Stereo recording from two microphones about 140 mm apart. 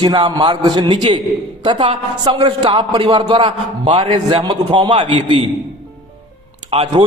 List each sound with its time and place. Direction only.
0.0 s a man's voice: 35° right (ahead or behind)
5.1 s a man's voice: 50° right (ahead or behind)
6.7 s a man's voice: 45° right (ahead or behind)